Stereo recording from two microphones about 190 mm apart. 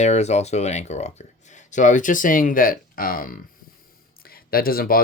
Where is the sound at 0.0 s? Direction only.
35° left (ahead or behind).